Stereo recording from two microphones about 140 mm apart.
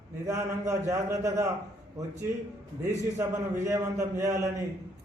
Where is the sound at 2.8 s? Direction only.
15° right (ahead or behind).